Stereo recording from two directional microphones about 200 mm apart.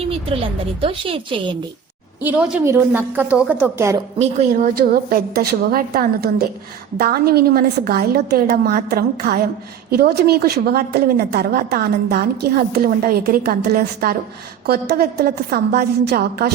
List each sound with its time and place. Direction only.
0.1 s speech: 30° right (ahead or behind)
2.2 s a woman's voice: 10° right (ahead or behind)
4.2 s a woman's voice: 35° right (ahead or behind); by 16.5 s 50° right (ahead or behind)